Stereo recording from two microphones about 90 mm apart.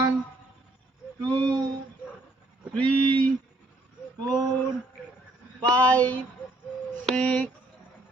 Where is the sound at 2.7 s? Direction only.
15° left (ahead or behind).